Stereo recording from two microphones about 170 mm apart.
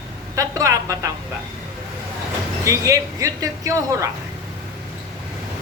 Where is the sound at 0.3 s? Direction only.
20° right (ahead or behind).